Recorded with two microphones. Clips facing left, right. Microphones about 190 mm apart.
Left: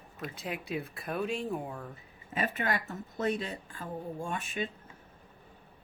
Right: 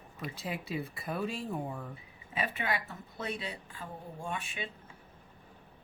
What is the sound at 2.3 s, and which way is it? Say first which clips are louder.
Speech: left 2 dB; 45° left (ahead or behind).